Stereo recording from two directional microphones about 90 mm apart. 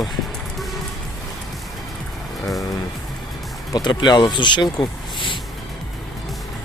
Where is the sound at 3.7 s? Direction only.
50° left (ahead or behind).